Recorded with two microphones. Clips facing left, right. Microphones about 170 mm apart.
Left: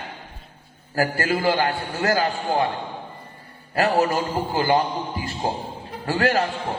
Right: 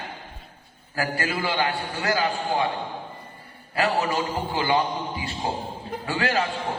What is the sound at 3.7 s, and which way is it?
A man's voice, 45° left (ahead or behind).